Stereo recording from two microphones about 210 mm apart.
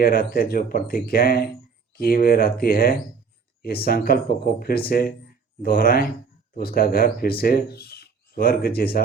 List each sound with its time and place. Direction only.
0.0 s speech: 45° left (ahead or behind)